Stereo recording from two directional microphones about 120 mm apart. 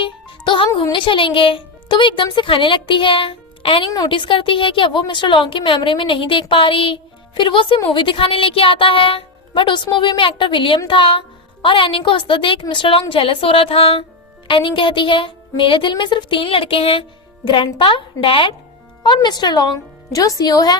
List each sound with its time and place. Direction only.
0.0 s music: 45° left (ahead or behind)
0.9 s a woman's voice: 45° left (ahead or behind)